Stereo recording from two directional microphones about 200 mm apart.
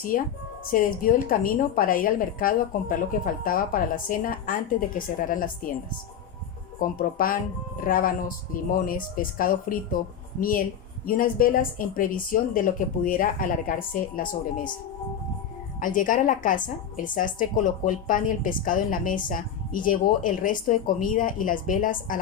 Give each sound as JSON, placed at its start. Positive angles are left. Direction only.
{"t": 0.1, "sound": "a woman's voice", "side_deg": 40}
{"t": 6.7, "sound": "a woman's voice", "side_deg": 45}
{"t": 11.0, "sound": "a woman's voice", "side_deg": 45}
{"t": 15.8, "sound": "a woman's voice", "side_deg": 40}